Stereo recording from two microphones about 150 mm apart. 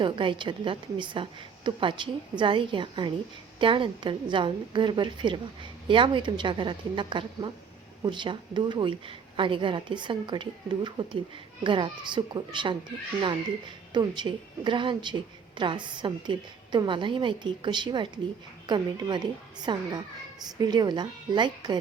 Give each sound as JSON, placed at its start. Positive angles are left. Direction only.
{"t": 0.0, "sound": "a woman's voice", "side_deg": -35}
{"t": 13.9, "sound": "a woman's voice", "side_deg": -30}